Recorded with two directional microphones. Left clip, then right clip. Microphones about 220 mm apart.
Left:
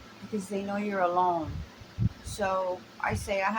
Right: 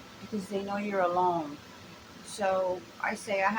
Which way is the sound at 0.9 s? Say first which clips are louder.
Left 1 dB; 15° left (ahead or behind).